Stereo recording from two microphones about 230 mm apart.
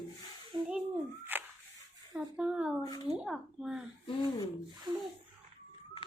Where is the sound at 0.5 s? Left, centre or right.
Centre.